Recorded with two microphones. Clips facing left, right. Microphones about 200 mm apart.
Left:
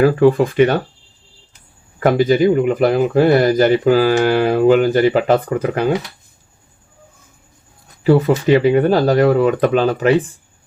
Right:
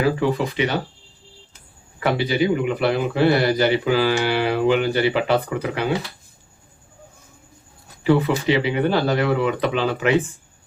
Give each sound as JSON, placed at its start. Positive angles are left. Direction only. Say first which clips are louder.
{"t": 0.0, "sound": "speech", "louder": "left 8 dB", "side_deg": 50}
{"t": 2.0, "sound": "speech", "louder": "left 7 dB", "side_deg": 45}
{"t": 8.0, "sound": "speech", "louder": "left 5 dB", "side_deg": 40}